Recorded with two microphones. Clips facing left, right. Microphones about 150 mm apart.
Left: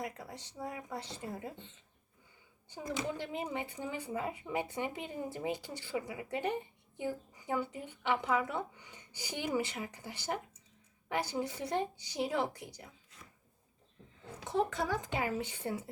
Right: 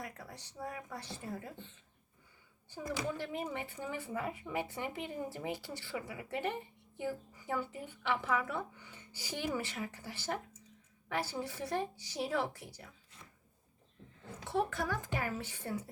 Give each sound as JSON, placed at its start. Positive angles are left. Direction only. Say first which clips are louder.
{"t": 0.0, "sound": "a woman's voice", "louder": "left 4 dB", "side_deg": 20}
{"t": 14.4, "sound": "a woman's voice", "louder": "left 2 dB", "side_deg": 20}